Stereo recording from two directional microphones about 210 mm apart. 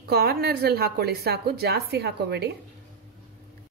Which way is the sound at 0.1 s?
50° right (ahead or behind).